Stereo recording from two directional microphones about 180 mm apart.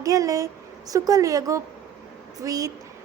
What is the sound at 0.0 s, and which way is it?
A woman's voice, 20° right (ahead or behind).